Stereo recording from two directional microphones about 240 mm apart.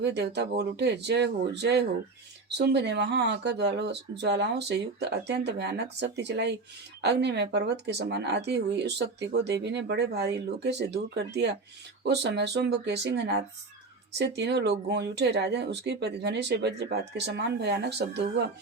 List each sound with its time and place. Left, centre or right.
0.0 s speech: right